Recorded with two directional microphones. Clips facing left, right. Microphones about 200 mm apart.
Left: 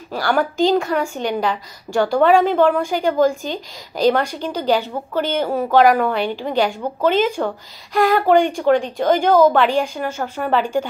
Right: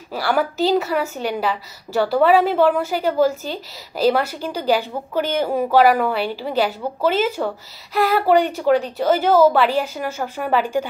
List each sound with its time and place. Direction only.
0.1 s a woman's voice: 5° right (ahead or behind)